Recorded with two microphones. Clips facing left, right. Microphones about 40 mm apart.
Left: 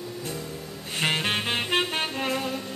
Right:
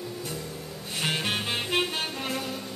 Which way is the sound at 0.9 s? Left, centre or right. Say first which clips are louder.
Left 3 dB; left.